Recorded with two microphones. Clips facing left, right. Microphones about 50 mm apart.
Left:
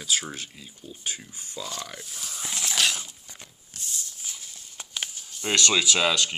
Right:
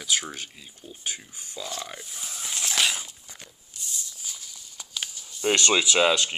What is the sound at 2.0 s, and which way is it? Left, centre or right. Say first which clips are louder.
Speech: even; centre.